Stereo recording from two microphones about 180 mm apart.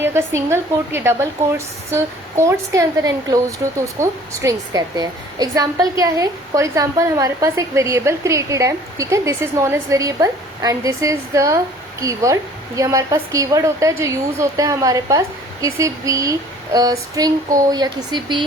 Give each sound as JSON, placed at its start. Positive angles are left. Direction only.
{"t": 0.0, "sound": "a woman's voice", "side_deg": -15}